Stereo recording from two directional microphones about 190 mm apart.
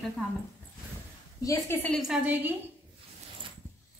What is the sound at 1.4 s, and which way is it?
Speech, 15° left (ahead or behind).